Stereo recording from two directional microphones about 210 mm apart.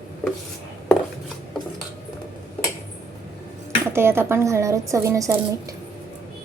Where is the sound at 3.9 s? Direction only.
10° right (ahead or behind).